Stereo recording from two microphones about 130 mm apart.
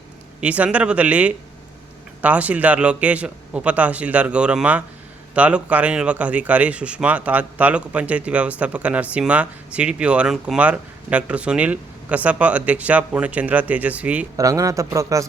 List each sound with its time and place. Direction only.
0.4 s speech: 10° right (ahead or behind)
14.3 s speech: 25° right (ahead or behind)